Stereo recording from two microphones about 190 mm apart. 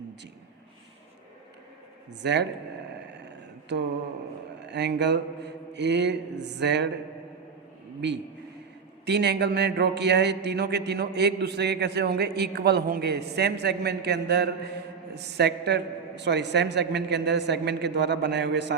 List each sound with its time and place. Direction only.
2.2 s speech: 65° right (ahead or behind)
4.6 s speech: 65° right (ahead or behind)
9.0 s speech: 60° right (ahead or behind)